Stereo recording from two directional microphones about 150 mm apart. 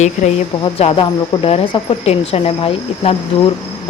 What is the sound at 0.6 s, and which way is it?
Speech, 40° left (ahead or behind).